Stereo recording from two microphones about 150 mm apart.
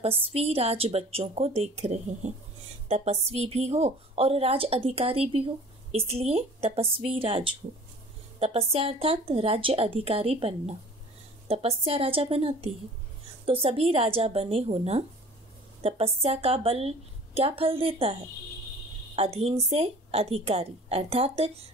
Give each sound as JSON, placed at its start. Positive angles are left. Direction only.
{"t": 0.0, "sound": "a woman's voice", "side_deg": -40}
{"t": 19.1, "sound": "a woman's voice", "side_deg": -40}